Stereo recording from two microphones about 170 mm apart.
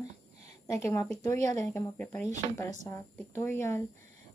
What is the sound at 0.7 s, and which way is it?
Speech, 15° left (ahead or behind).